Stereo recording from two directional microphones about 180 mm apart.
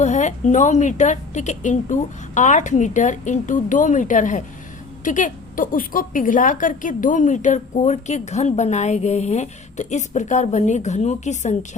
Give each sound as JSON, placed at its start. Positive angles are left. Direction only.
{"t": 0.0, "sound": "a woman's voice", "side_deg": 40}